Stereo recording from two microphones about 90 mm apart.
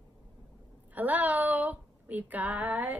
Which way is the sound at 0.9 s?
20° right (ahead or behind).